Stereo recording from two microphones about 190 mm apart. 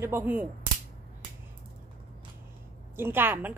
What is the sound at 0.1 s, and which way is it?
Speech, 10° right (ahead or behind).